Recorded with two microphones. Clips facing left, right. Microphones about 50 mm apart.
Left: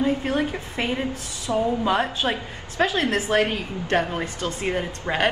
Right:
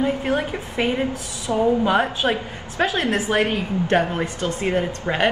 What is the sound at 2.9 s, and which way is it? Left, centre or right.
A woman's voice, right.